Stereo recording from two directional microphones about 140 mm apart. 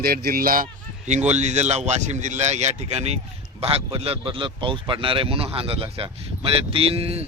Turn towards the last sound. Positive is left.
turn(degrees=-45)  # may be behind; listen again after turning